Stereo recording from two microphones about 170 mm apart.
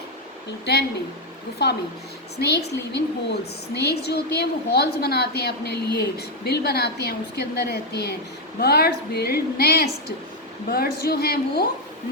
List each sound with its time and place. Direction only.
0.6 s a woman's voice: 75° left (ahead or behind)